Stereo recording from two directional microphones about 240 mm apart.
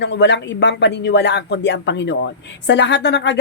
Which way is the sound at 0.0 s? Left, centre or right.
Left.